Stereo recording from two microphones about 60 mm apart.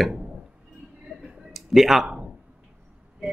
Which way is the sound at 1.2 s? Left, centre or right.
Centre.